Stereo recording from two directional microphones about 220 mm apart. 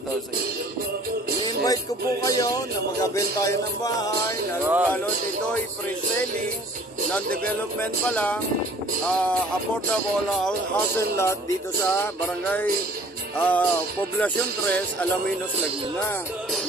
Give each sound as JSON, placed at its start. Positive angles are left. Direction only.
{"t": 1.4, "sound": "music", "side_deg": 15}
{"t": 4.6, "sound": "speech", "side_deg": -10}
{"t": 8.1, "sound": "speech", "side_deg": 5}
{"t": 11.0, "sound": "music", "side_deg": 15}